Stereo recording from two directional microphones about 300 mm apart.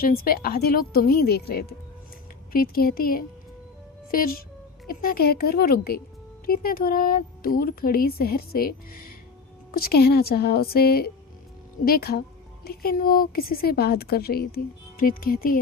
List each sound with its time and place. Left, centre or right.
0.0 s a woman's voice: left